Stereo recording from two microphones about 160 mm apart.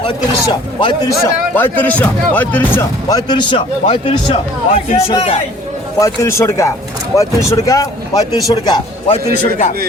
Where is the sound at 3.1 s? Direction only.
25° left (ahead or behind).